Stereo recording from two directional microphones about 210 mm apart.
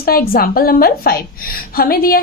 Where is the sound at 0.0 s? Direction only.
45° left (ahead or behind).